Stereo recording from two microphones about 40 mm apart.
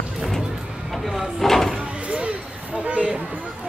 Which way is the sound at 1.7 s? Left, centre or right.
Right.